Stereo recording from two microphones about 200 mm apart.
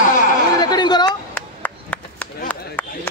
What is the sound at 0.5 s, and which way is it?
Chatter, 20° left (ahead or behind).